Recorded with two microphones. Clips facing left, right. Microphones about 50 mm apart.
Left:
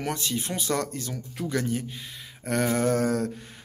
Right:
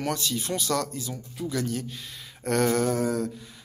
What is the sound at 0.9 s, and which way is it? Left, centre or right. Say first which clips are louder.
Speech: left 1 dB; left.